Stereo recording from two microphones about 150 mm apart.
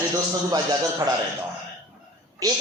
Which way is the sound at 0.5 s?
25° right (ahead or behind).